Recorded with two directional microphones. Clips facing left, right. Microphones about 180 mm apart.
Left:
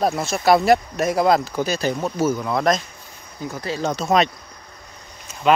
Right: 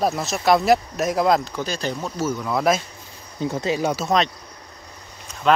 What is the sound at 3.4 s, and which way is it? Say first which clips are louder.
Speech: right 3 dB; 25° right (ahead or behind).